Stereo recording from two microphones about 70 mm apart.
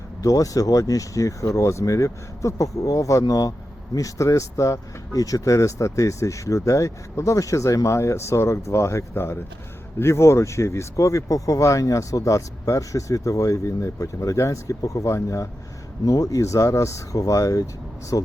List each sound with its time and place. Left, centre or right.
0.2 s speech: left